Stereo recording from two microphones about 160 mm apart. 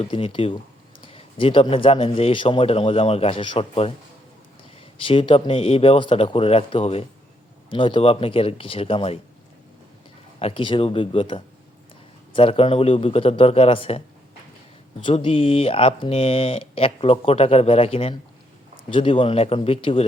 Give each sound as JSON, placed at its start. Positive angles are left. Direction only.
{"t": 0.0, "sound": "speech", "side_deg": 35}
{"t": 4.9, "sound": "speech", "side_deg": 35}
{"t": 10.4, "sound": "speech", "side_deg": 30}
{"t": 15.0, "sound": "speech", "side_deg": 35}